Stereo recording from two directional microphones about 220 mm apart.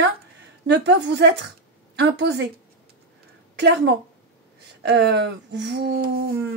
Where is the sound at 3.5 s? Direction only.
50° right (ahead or behind).